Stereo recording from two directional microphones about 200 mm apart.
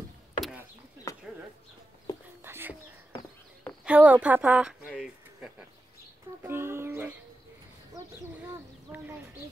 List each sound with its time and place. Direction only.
0.4 s chop: 5° right (ahead or behind)
1.1 s a sound: 15° left (ahead or behind)
2.1 s whispering: 15° left (ahead or behind)
2.4 s whispering: 10° right (ahead or behind)
3.8 s a sound: 5° right (ahead or behind)
8.9 s speech: 10° right (ahead or behind)